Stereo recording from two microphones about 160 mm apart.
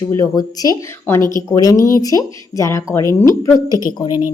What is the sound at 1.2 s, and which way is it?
Speech, 25° right (ahead or behind).